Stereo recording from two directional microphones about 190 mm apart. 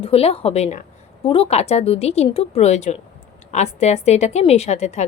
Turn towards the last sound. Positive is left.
turn(degrees=35)  # may be behind; listen again after turning